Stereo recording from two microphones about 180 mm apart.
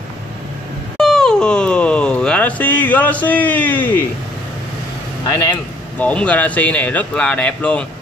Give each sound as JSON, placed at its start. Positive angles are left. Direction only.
{"t": 0.9, "sound": "wail", "side_deg": 5}
{"t": 5.2, "sound": "speech", "side_deg": 20}
{"t": 5.9, "sound": "speech", "side_deg": 5}